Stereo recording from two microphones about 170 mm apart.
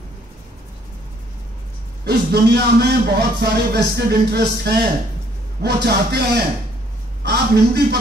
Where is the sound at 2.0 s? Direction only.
75° right (ahead or behind).